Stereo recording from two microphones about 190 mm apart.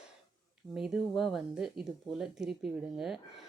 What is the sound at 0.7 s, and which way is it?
Speech, 5° right (ahead or behind).